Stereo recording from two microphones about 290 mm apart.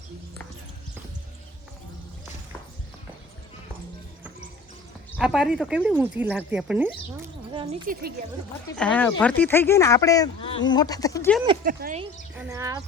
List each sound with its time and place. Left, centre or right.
5.1 s speech: centre
7.7 s speech: right
8.7 s speech: centre
11.6 s speech: right
12.4 s speech: centre